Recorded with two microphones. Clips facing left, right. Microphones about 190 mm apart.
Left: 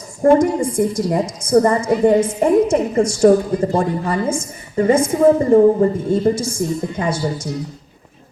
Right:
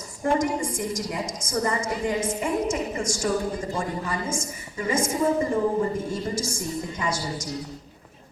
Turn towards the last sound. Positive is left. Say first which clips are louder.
# left 8 dB
turn(degrees=60)  # may be behind; listen again after turning